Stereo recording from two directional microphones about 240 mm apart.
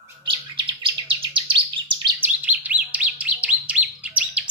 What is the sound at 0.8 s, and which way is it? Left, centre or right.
Chirp, right.